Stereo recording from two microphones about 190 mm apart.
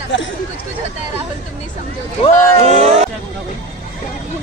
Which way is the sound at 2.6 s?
35° right (ahead or behind).